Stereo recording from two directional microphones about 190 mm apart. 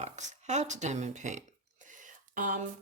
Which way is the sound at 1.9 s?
45° right (ahead or behind).